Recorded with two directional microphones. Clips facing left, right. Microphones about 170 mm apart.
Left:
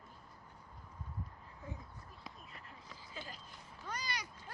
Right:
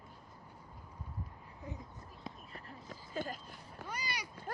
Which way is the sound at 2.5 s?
45° right (ahead or behind).